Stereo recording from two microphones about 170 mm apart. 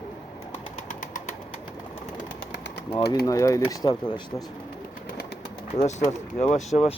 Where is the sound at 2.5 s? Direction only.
90° left.